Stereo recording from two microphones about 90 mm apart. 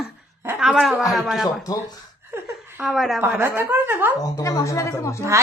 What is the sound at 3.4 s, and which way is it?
Speech, 20° right (ahead or behind).